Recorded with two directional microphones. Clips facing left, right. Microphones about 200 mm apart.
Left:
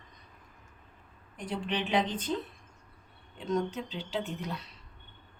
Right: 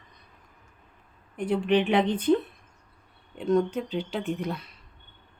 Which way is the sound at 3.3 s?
55° right (ahead or behind).